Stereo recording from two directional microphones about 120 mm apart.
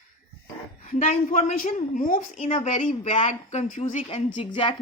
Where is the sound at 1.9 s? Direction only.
90° left; by 4.2 s 60° left (ahead or behind).